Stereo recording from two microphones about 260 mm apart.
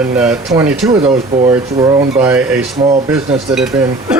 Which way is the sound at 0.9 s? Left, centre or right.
Right.